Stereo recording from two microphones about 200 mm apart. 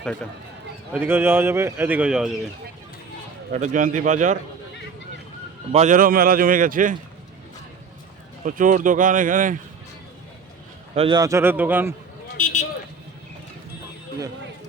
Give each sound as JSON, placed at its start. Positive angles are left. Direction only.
{"t": 0.9, "sound": "a man's voice", "side_deg": -10}
{"t": 3.5, "sound": "speech", "side_deg": -40}
{"t": 5.7, "sound": "a man's voice", "side_deg": -40}
{"t": 8.4, "sound": "speech", "side_deg": -40}
{"t": 10.9, "sound": "a man's voice", "side_deg": -25}
{"t": 12.4, "sound": "vehicle", "side_deg": 40}